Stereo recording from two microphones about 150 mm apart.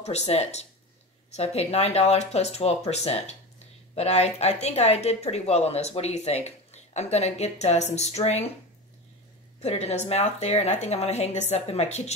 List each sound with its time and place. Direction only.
0.0 s speech: 45° left (ahead or behind)
9.6 s speech: 45° left (ahead or behind)